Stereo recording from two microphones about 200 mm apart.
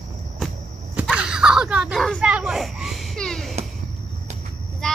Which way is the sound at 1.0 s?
5° right (ahead or behind).